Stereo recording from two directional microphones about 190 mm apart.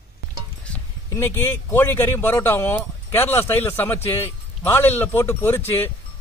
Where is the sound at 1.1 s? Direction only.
10° left (ahead or behind).